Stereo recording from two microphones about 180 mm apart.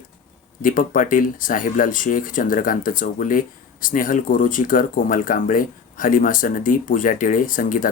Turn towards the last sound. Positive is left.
turn(degrees=50)  # may be behind; listen again after turning